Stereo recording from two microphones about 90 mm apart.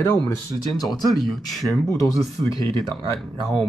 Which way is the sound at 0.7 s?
Centre (ahead or behind).